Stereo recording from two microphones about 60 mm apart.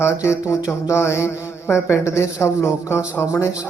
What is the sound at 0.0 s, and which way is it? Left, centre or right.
A man's voice, left.